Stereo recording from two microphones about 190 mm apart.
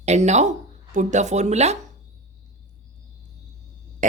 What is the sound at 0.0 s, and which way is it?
Speech, 35° right (ahead or behind).